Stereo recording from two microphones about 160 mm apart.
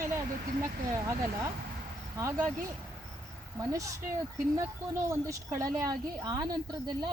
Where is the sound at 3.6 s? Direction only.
20° right (ahead or behind).